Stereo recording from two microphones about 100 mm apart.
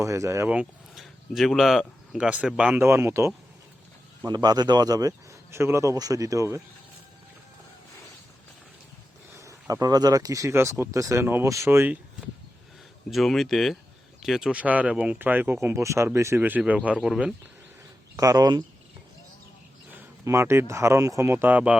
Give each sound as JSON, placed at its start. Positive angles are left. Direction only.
{"t": 0.0, "sound": "speech", "side_deg": -30}
{"t": 0.4, "sound": "speech", "side_deg": -10}
{"t": 0.9, "sound": "speech", "side_deg": 0}
{"t": 2.7, "sound": "speech", "side_deg": -25}
{"t": 4.3, "sound": "speech", "side_deg": -45}
{"t": 9.3, "sound": "speech", "side_deg": -30}
{"t": 13.1, "sound": "speech", "side_deg": 0}
{"t": 18.2, "sound": "speech", "side_deg": -40}
{"t": 20.2, "sound": "speech", "side_deg": -25}